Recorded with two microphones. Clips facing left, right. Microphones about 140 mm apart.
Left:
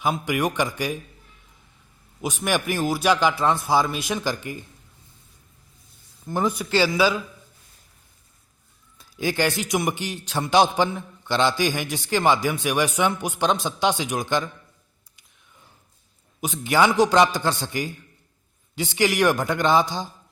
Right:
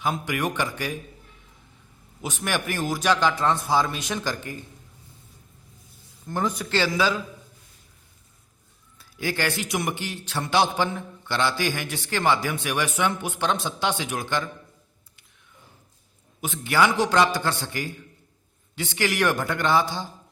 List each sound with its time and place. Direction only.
0.0 s a man's voice: 15° left (ahead or behind)
2.2 s a man's voice: 15° left (ahead or behind)
6.2 s a man's voice: 10° left (ahead or behind)
9.0 s a man's voice: 20° left (ahead or behind)
16.4 s a man's voice: 15° left (ahead or behind)